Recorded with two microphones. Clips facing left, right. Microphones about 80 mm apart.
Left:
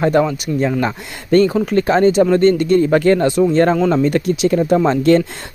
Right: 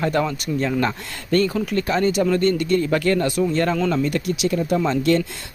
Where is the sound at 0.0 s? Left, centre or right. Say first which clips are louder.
Left 7 dB; left.